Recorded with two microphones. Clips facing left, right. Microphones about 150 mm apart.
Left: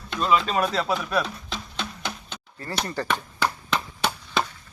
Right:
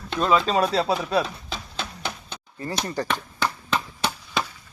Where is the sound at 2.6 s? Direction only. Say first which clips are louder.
Right 2 dB; 15° right (ahead or behind).